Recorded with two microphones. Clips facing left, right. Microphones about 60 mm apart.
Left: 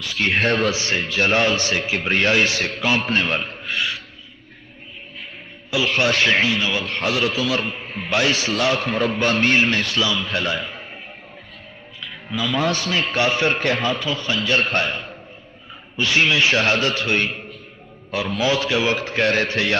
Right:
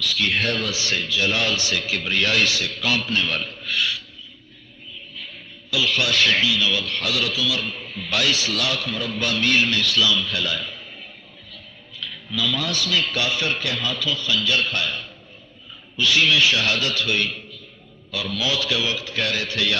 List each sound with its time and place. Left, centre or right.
0.0 s a man's voice: left
5.7 s a man's voice: left
11.9 s a man's voice: left